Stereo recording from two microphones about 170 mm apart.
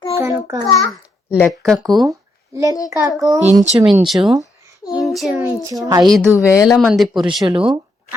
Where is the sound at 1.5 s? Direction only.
Centre (ahead or behind).